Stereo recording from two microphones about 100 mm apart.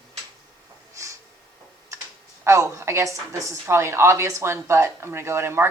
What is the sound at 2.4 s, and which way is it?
A woman's voice, 30° right (ahead or behind).